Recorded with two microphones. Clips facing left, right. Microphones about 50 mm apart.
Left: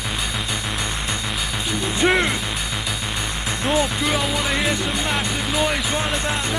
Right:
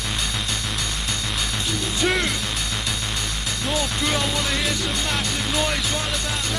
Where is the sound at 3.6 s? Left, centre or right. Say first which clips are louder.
Left 5 dB; left.